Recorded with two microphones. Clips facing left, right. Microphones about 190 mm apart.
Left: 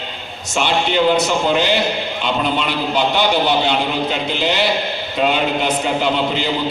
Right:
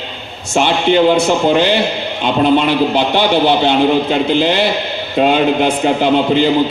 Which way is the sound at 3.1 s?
55° right (ahead or behind).